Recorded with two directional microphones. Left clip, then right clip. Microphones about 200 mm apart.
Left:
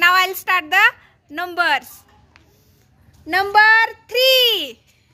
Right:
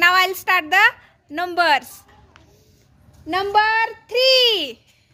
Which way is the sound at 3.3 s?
15° left (ahead or behind).